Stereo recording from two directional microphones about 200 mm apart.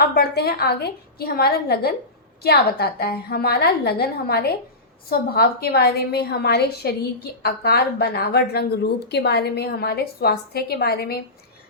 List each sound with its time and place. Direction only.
0.2 s a woman's voice: 50° left (ahead or behind)